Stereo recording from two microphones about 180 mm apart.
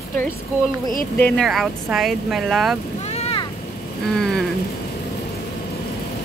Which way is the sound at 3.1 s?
35° left (ahead or behind).